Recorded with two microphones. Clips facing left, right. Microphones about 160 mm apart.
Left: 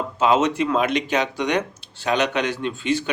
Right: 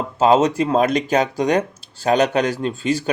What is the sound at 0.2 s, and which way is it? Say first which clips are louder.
Speech: right 4 dB; 35° right (ahead or behind).